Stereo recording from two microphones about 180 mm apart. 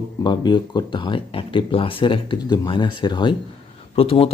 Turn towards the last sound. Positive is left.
turn(degrees=30)  # may be behind; listen again after turning